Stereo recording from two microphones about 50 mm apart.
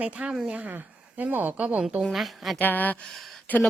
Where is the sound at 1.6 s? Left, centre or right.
Right.